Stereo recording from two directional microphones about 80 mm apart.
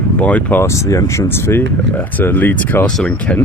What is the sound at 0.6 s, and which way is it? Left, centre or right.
Speech, left.